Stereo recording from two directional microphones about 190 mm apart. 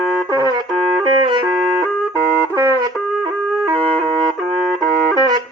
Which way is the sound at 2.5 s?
20° right (ahead or behind).